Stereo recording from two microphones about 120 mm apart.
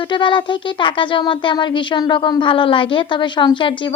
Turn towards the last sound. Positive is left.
turn(degrees=45)  # may be behind; listen again after turning